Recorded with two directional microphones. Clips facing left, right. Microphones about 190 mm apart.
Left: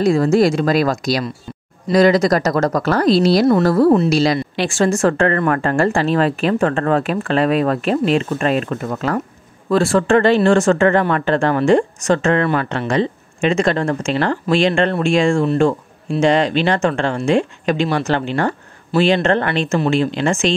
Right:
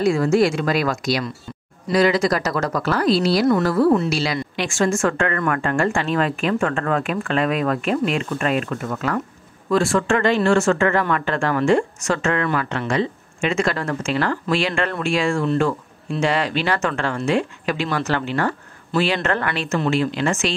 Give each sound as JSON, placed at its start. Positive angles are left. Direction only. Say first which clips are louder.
{"t": 0.0, "sound": "speech", "louder": "left 3 dB", "side_deg": 35}